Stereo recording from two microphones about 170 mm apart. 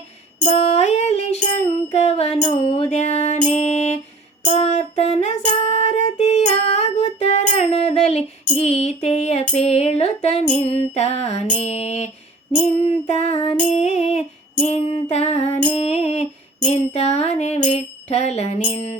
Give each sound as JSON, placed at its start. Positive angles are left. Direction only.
{"t": 0.4, "sound": "music", "side_deg": 40}